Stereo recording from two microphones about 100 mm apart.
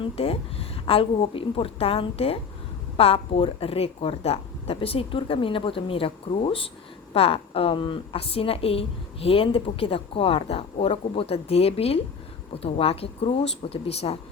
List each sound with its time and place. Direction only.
0.0 s a woman's voice: 75° left (ahead or behind)